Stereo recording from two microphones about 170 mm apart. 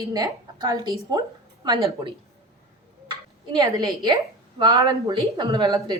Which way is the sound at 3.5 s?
20° right (ahead or behind).